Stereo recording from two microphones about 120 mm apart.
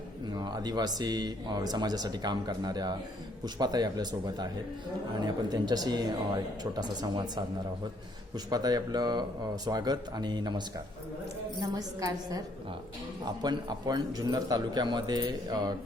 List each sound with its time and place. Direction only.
0.3 s speech: 35° right (ahead or behind)
8.4 s speech: 35° right (ahead or behind)
11.7 s speech: 30° right (ahead or behind)
13.4 s speech: 35° right (ahead or behind)